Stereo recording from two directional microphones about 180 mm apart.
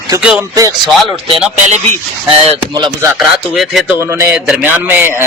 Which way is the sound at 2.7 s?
25° right (ahead or behind).